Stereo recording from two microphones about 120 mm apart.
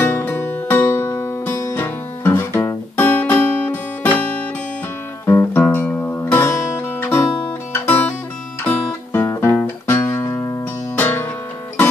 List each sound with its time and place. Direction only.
0.0 s music: 20° left (ahead or behind)
7.7 s guitar: 15° left (ahead or behind)
8.6 s music: 20° left (ahead or behind)